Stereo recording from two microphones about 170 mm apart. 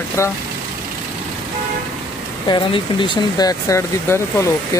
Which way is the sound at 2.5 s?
30° left (ahead or behind).